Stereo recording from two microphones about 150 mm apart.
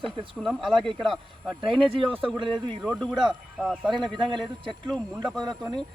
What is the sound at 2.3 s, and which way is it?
Speech, 30° right (ahead or behind).